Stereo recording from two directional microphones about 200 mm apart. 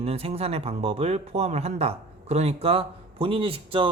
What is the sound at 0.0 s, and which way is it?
Speech, 30° right (ahead or behind).